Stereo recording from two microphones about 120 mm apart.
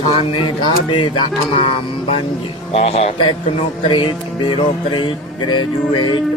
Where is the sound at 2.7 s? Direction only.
65° left (ahead or behind).